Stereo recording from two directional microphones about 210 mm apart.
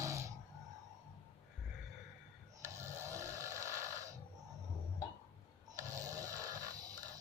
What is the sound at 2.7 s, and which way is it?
Snoring, 15° right (ahead or behind).